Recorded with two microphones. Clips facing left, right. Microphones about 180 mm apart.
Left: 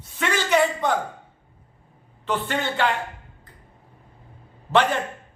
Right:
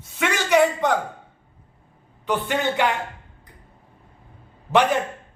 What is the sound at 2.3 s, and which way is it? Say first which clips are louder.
Speech: right 3 dB; 15° right (ahead or behind).